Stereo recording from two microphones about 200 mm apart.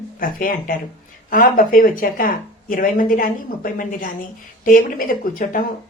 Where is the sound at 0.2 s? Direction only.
45° left (ahead or behind).